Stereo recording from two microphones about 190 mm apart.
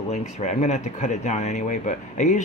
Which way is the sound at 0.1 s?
35° left (ahead or behind).